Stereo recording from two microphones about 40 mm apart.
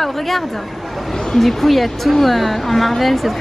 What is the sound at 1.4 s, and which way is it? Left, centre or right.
A woman's voice, centre.